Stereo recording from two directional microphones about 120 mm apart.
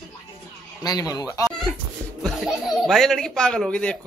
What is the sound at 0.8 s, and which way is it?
Speech, 30° left (ahead or behind).